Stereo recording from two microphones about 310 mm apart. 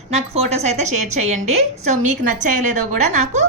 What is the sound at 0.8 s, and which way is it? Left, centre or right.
Speech, right.